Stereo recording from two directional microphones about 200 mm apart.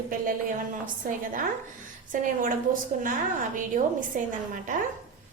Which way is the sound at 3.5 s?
40° right (ahead or behind).